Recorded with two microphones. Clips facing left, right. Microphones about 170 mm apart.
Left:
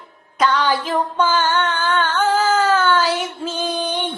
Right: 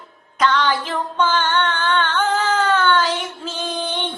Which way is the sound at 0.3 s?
10° left (ahead or behind).